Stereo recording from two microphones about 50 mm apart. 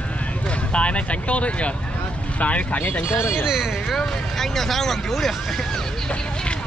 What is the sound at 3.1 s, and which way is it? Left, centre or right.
Speech, left.